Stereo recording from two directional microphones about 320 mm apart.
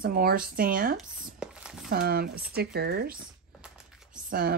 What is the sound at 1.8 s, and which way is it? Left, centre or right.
Speech, right.